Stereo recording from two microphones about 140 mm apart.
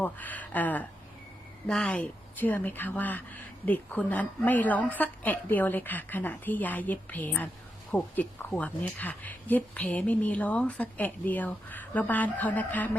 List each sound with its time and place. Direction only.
0.0 s speech: 10° left (ahead or behind)